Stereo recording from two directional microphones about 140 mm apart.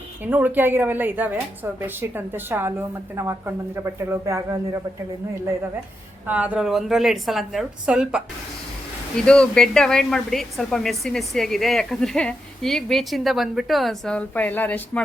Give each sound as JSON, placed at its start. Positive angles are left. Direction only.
{"t": 0.3, "sound": "a woman's voice", "side_deg": -10}
{"t": 6.2, "sound": "a woman's voice", "side_deg": -10}
{"t": 9.1, "sound": "a woman's voice", "side_deg": 5}